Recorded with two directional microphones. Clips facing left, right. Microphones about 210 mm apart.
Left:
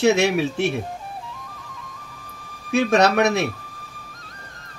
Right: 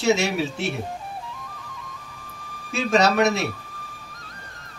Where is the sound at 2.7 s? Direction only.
60° left (ahead or behind).